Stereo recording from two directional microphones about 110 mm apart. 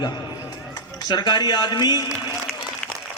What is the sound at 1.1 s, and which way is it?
A man's voice, 40° left (ahead or behind).